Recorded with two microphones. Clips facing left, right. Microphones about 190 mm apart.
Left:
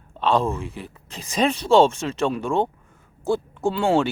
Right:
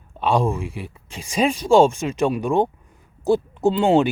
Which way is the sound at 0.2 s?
10° right (ahead or behind).